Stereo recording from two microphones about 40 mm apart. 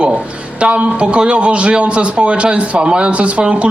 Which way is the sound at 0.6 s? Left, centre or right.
Right.